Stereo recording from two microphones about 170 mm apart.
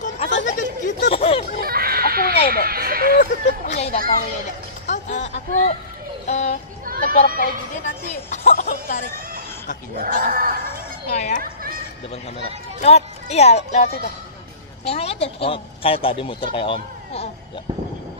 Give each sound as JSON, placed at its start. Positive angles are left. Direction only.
{"t": 0.0, "sound": "a sound", "side_deg": 45}
{"t": 1.1, "sound": "speech", "side_deg": 35}
{"t": 1.6, "sound": "a sound", "side_deg": -60}
{"t": 2.5, "sound": "speech", "side_deg": -60}
{"t": 3.2, "sound": "speech", "side_deg": 45}
{"t": 3.9, "sound": "music", "side_deg": -60}
{"t": 4.8, "sound": "speech", "side_deg": 45}
{"t": 6.9, "sound": "speech", "side_deg": -60}
{"t": 7.8, "sound": "a woman's voice", "side_deg": 45}
{"t": 10.2, "sound": "music", "side_deg": -60}
{"t": 11.1, "sound": "speech", "side_deg": 45}
{"t": 12.4, "sound": "speech", "side_deg": 40}